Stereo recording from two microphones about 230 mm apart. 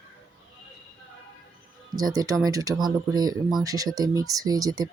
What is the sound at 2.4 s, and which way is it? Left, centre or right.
Speech, centre.